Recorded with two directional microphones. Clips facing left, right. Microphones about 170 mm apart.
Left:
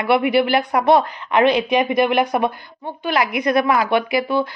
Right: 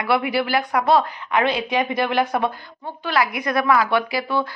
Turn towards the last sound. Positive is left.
turn(degrees=20)  # may be behind; listen again after turning